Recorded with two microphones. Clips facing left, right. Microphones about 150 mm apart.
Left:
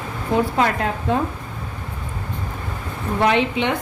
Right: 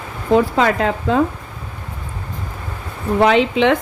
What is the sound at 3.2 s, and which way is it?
Speech, 90° right.